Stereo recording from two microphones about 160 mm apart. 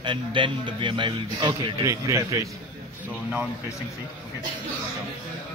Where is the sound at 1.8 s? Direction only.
20° right (ahead or behind).